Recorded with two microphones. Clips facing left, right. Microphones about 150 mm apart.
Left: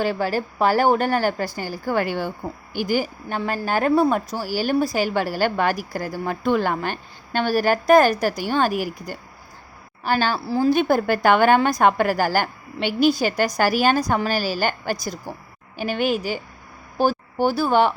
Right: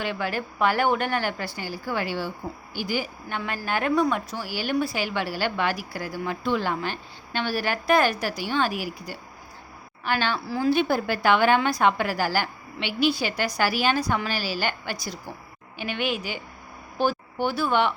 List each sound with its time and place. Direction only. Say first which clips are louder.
0.0 s a woman's voice: left 6 dB; 35° left (ahead or behind)
10.7 s a woman's voice: left 3 dB; 45° left (ahead or behind)